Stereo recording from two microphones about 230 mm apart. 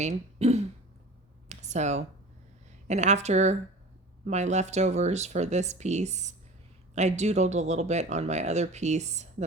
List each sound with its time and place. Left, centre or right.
0.0 s speech: right
1.5 s a sound: right
2.8 s speech: right